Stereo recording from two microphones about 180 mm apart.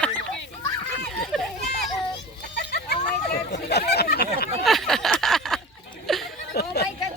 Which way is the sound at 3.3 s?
65° left (ahead or behind).